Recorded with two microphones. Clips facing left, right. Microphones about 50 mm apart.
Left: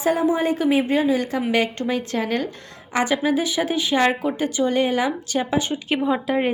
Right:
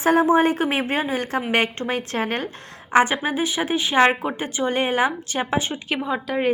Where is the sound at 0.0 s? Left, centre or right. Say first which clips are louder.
Right 3 dB; right.